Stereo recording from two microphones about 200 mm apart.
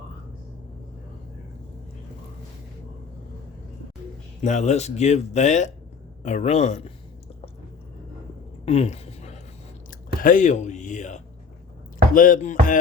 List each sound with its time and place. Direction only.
4.4 s speech: 35° left (ahead or behind)
8.6 s a sound: 30° left (ahead or behind)
9.9 s speech: 45° left (ahead or behind)
12.1 s chopping: 40° left (ahead or behind)